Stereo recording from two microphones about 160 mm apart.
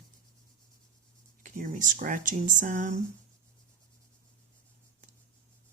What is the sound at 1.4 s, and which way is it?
Speech, 55° right (ahead or behind).